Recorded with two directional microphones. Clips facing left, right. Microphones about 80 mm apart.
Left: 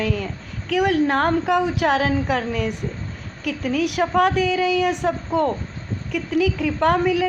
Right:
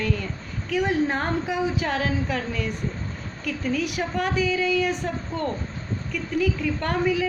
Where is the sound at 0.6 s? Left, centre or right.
Left.